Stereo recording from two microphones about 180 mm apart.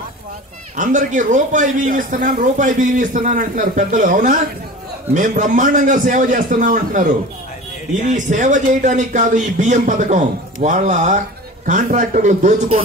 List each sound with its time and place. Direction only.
0.7 s a man's voice: 45° right (ahead or behind)